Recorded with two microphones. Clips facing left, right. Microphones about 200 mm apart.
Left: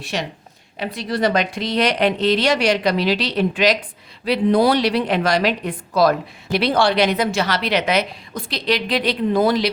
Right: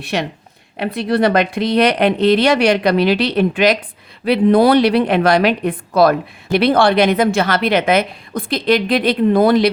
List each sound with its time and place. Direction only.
0.0 s a woman's voice: 60° right (ahead or behind)